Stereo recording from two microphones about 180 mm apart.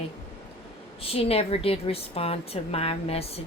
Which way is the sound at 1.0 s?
35° left (ahead or behind).